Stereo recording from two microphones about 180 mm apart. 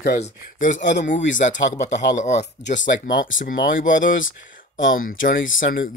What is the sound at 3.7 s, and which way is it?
Speech, 90° left.